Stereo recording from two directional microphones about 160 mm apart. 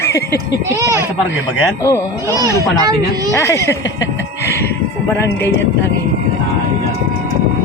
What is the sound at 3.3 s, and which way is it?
Speech, 15° left (ahead or behind).